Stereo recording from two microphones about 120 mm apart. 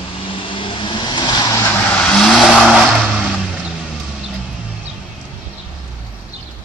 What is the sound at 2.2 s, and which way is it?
Vehicle, 5° left (ahead or behind).